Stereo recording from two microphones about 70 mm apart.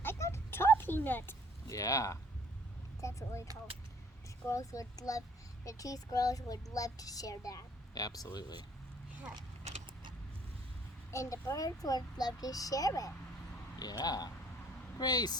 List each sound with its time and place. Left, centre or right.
0.0 s a sound: left
1.6 s a child's voice: left
4.4 s a child's voice: left
11.1 s speech: left
13.7 s speech: left